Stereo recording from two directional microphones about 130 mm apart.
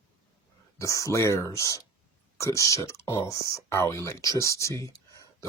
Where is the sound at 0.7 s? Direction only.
25° left (ahead or behind).